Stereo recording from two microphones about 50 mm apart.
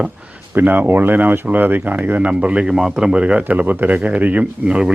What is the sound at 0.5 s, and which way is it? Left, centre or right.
Speech, right.